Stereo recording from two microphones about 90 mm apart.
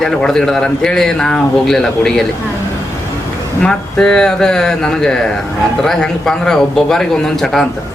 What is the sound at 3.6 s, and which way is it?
A man's voice, 10° left (ahead or behind).